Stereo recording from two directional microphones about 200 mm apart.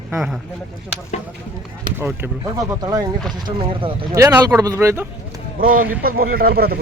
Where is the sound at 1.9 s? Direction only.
10° right (ahead or behind).